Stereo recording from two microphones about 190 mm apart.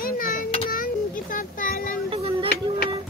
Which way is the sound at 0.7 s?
45° left (ahead or behind).